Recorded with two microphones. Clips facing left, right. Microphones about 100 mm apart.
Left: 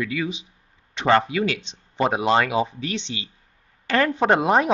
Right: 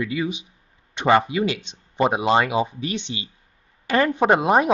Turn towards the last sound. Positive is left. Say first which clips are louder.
# right 1 dB
turn(degrees=-5)  # may be behind; listen again after turning